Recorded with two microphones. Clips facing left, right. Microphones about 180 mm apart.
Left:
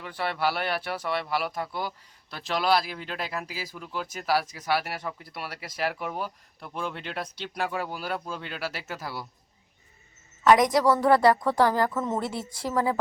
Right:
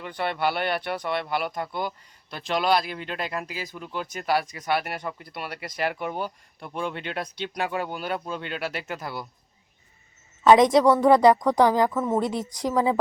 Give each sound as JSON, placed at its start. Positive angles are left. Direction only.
{"t": 0.0, "sound": "speech", "side_deg": 0}
{"t": 10.4, "sound": "a woman's voice", "side_deg": -25}